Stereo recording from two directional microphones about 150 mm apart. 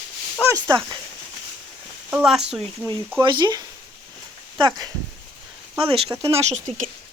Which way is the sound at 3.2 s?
30° right (ahead or behind).